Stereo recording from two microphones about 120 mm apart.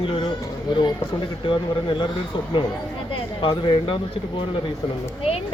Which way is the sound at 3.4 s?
45° left (ahead or behind).